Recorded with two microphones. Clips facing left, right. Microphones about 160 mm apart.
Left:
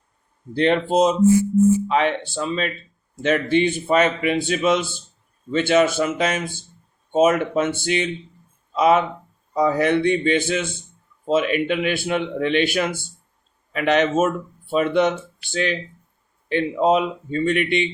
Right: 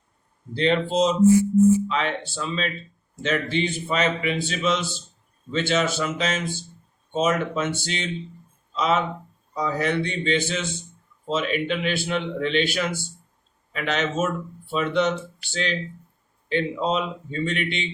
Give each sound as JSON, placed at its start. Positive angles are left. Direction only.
{"t": 0.5, "sound": "a man's voice", "side_deg": 55}
{"t": 16.5, "sound": "a man's voice", "side_deg": 55}